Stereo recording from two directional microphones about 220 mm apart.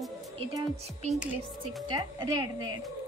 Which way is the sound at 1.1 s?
Centre (ahead or behind).